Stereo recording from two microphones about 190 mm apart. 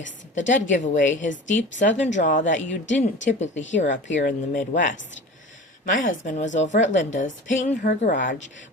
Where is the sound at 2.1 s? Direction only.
40° left (ahead or behind).